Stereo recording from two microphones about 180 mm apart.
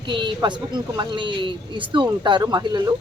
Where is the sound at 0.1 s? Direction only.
25° right (ahead or behind).